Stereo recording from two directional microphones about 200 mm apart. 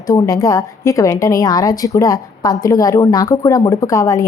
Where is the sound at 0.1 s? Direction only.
20° left (ahead or behind).